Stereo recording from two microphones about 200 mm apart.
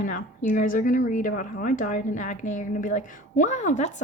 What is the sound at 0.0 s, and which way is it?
Speech, 40° left (ahead or behind).